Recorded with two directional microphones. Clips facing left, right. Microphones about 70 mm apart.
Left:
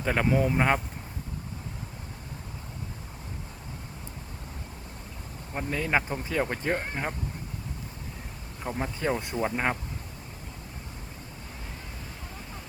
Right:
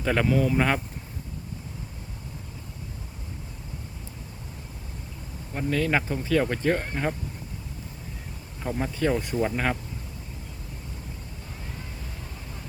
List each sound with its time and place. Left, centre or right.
0.0 s speech: centre
0.3 s speech: left
5.5 s speech: centre
8.7 s speech: centre